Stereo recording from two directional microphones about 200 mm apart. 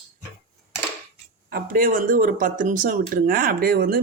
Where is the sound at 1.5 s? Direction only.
45° right (ahead or behind).